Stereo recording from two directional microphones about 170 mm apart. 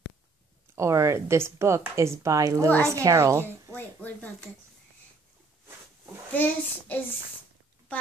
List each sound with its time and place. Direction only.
0.7 s speech: 15° right (ahead or behind)
3.7 s speech: 10° left (ahead or behind)
6.3 s a child's voice: 10° left (ahead or behind)